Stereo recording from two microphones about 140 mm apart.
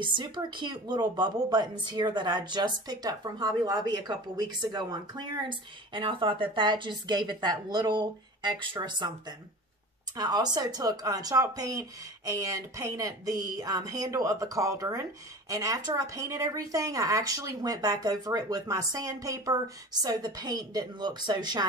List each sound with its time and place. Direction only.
0.1 s speech: 30° right (ahead or behind)
10.1 s speech: 25° right (ahead or behind)